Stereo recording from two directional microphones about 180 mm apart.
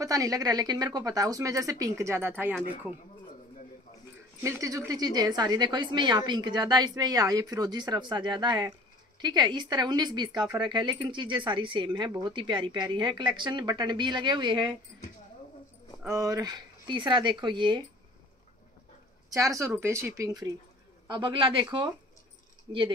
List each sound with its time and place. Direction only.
0.0 s speech: 20° right (ahead or behind)
4.4 s speech: 15° right (ahead or behind)
16.0 s speech: 15° right (ahead or behind)
19.3 s speech: 20° right (ahead or behind)
21.1 s speech: 25° right (ahead or behind)